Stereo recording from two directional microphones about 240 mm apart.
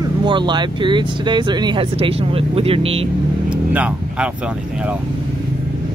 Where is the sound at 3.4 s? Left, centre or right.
Centre.